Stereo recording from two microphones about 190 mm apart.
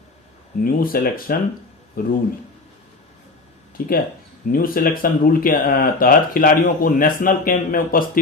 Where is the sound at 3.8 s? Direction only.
50° left (ahead or behind).